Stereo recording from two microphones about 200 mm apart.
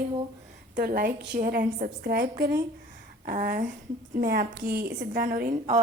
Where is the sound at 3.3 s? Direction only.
45° right (ahead or behind).